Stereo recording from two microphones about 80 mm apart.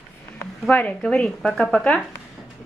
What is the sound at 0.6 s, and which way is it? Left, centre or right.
Speech, centre.